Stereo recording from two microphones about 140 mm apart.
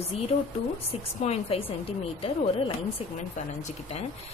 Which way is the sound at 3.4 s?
60° left (ahead or behind).